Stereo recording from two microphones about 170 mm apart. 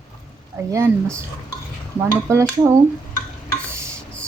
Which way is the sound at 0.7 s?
15° right (ahead or behind).